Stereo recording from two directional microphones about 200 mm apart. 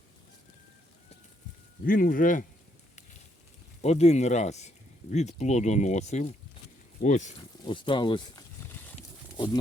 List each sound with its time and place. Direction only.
1.8 s speech: 45° left (ahead or behind)
3.8 s speech: 35° left (ahead or behind)
7.6 s speech: 25° left (ahead or behind)
8.7 s horse: 10° left (ahead or behind)
9.0 s a sound: 25° left (ahead or behind)